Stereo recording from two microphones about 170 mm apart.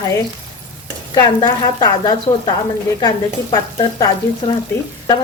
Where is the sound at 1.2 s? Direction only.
25° left (ahead or behind).